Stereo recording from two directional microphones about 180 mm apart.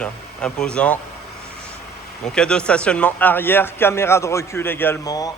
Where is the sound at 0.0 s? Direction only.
5° left (ahead or behind).